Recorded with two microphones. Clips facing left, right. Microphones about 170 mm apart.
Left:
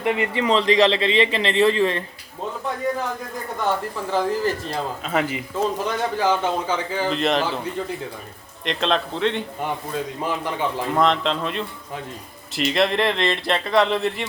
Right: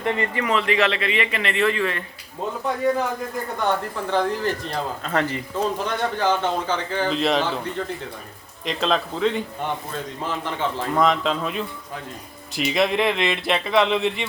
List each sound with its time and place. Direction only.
0.0 s speech: 15° left (ahead or behind)
3.6 s speech: 5° left (ahead or behind)
8.6 s speech: centre (ahead or behind)
10.2 s a man's voice: 10° left (ahead or behind)
11.0 s speech: 5° right (ahead or behind)